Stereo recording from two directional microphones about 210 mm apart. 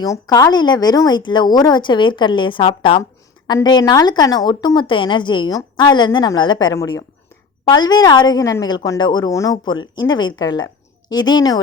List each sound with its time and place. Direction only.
0.0 s speech: 15° left (ahead or behind)